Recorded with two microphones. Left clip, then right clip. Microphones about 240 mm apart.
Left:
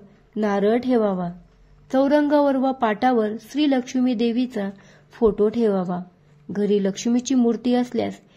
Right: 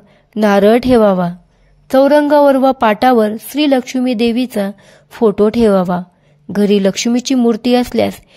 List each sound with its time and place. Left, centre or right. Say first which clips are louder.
0.3 s a woman's voice: right 11 dB; right